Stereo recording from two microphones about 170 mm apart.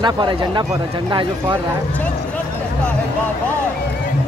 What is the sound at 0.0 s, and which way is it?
Speech, 25° right (ahead or behind).